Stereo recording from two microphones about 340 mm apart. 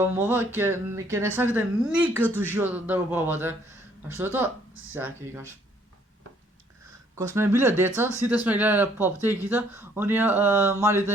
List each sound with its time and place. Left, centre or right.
0.0 s speech: centre
4.7 s speech: right
4.9 s speech: centre
7.2 s speech: centre